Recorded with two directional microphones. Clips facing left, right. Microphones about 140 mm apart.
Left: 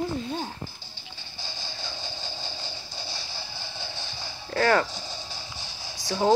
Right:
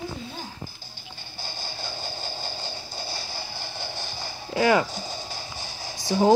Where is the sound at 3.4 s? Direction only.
10° right (ahead or behind).